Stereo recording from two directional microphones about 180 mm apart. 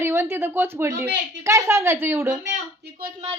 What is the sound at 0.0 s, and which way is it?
Speech, 15° right (ahead or behind).